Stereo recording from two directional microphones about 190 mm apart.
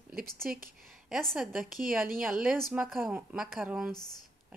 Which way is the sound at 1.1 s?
Centre (ahead or behind).